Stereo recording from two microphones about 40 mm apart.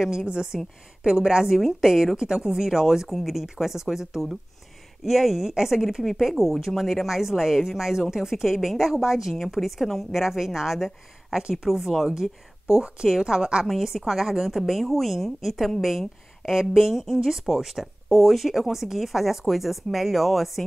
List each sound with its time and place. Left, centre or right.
0.0 s a woman's voice: centre
13.7 s a woman's voice: centre